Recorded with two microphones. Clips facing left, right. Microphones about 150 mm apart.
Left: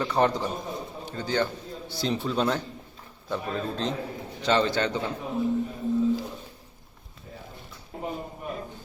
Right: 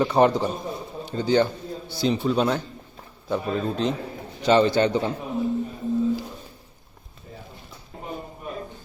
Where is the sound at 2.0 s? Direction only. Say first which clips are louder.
Right 5 dB; 5° right (ahead or behind).